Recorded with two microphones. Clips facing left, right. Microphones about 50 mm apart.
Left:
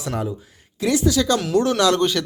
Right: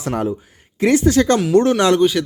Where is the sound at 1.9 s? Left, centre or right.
Centre.